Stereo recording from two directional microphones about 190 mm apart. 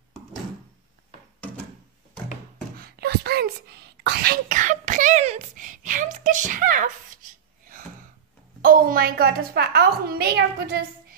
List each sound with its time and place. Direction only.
2.8 s wail: 55° right (ahead or behind)
4.0 s a sound: 60° right (ahead or behind)
8.6 s a woman's voice: 50° right (ahead or behind)